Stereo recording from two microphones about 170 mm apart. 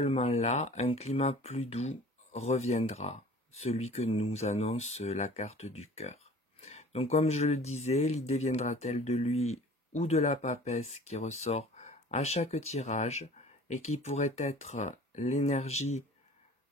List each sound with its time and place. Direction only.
0.0 s speech: 35° left (ahead or behind)